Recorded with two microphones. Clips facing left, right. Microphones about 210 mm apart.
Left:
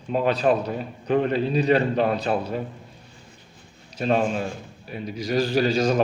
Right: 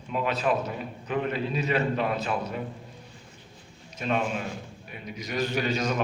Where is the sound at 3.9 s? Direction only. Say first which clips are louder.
Left 6 dB; 35° left (ahead or behind).